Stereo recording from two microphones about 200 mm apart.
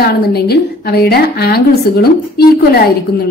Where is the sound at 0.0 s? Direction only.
55° left (ahead or behind).